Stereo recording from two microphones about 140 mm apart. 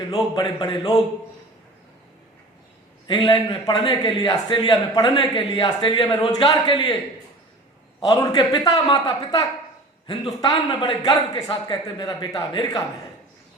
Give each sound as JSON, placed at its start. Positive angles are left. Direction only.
{"t": 0.1, "sound": "a man's voice", "side_deg": 25}
{"t": 3.1, "sound": "a man's voice", "side_deg": 35}
{"t": 8.0, "sound": "speech", "side_deg": 25}